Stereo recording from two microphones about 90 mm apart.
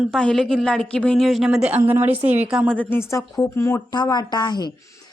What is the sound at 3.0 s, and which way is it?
Speech, 35° left (ahead or behind).